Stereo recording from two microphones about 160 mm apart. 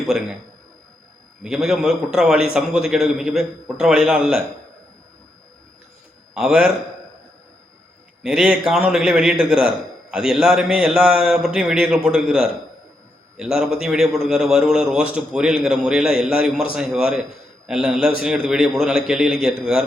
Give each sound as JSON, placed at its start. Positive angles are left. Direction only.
{"t": 1.5, "sound": "a man's voice", "side_deg": -5}
{"t": 6.3, "sound": "a man's voice", "side_deg": -5}
{"t": 8.2, "sound": "a man's voice", "side_deg": -5}